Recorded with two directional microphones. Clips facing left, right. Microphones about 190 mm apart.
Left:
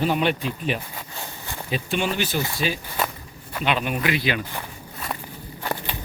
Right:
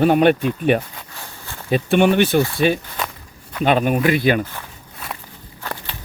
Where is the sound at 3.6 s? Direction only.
45° right (ahead or behind).